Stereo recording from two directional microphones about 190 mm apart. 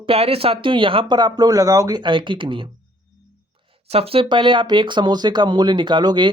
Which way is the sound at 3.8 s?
30° right (ahead or behind).